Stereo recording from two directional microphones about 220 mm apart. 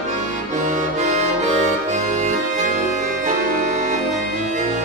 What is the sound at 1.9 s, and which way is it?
Music, 35° right (ahead or behind).